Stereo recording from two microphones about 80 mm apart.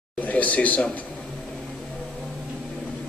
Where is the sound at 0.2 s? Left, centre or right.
Centre.